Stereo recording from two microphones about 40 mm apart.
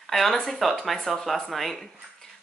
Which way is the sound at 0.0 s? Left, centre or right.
Centre.